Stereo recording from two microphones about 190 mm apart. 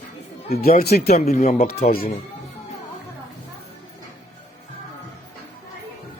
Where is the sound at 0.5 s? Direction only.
50° left (ahead or behind).